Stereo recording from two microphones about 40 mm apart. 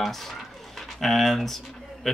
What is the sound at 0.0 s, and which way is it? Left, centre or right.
Speech, centre.